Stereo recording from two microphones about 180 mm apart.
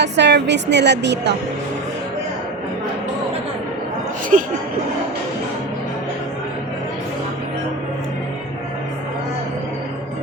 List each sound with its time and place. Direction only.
0.0 s a woman's voice: 70° right (ahead or behind)
4.3 s speech: 45° right (ahead or behind)